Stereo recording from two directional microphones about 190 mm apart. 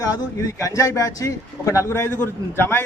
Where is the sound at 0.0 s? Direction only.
20° left (ahead or behind).